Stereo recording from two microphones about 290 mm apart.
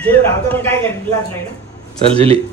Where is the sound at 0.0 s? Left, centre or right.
Centre.